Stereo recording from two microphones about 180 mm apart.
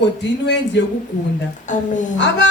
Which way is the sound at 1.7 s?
45° left (ahead or behind).